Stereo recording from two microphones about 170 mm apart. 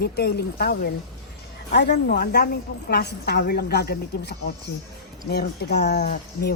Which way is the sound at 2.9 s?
80° left.